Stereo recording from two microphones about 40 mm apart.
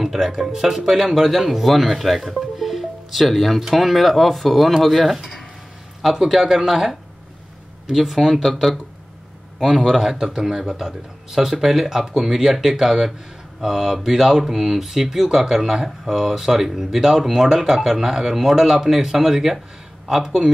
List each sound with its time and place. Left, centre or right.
0.0 s speech: centre
5.1 s a sound: centre
6.1 s speech: centre
9.8 s speech: centre
10.1 s speech: centre